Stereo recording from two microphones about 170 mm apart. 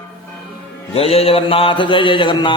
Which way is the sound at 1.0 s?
35° left (ahead or behind).